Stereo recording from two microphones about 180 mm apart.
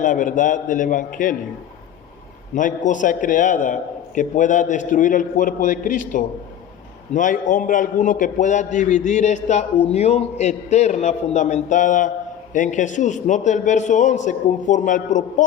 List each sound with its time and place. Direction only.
0.0 s a man's voice: 45° left (ahead or behind)
2.6 s a man's voice: 45° left (ahead or behind)
7.1 s a man's voice: 45° left (ahead or behind)